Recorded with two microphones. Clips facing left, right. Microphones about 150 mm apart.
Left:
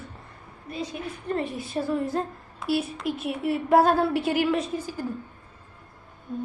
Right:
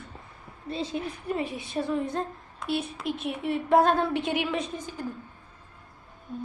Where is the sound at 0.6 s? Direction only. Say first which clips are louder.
Right 2 dB; 30° right (ahead or behind).